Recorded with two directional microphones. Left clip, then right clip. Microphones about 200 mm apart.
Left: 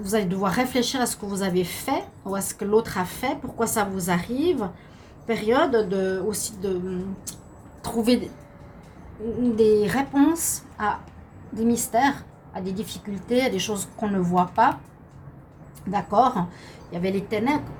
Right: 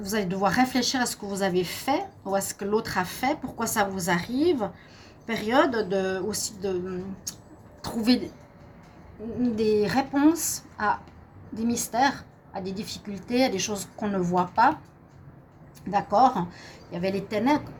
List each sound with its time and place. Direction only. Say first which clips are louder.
0.0 s a woman's voice: left 1 dB; 45° right (ahead or behind)
9.6 s a woman's voice: left 4 dB; 40° right (ahead or behind)
15.9 s a woman's voice: even; 40° right (ahead or behind)